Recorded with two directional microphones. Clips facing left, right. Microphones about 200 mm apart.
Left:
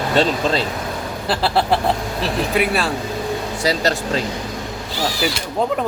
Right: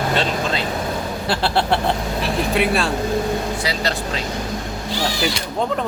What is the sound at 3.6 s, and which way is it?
Speech, 40° left (ahead or behind).